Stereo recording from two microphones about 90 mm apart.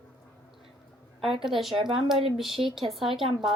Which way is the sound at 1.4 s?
Centre (ahead or behind).